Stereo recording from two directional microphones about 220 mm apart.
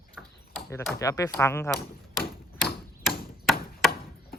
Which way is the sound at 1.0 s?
15° left (ahead or behind).